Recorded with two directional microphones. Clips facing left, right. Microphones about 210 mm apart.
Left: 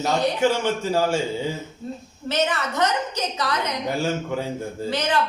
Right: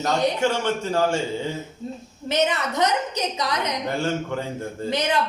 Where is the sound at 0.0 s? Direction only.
5° left (ahead or behind).